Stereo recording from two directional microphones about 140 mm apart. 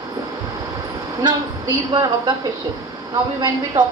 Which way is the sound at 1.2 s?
30° right (ahead or behind).